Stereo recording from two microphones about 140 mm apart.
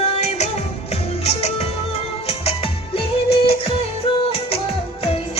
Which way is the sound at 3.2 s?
45° left (ahead or behind).